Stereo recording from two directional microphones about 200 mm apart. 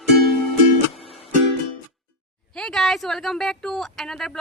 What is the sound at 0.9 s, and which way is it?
Music, 30° left (ahead or behind).